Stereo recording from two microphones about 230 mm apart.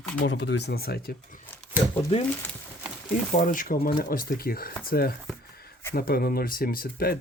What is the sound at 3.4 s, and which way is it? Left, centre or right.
Speech, left.